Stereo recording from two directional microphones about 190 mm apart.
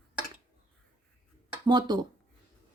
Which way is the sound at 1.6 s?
20° right (ahead or behind).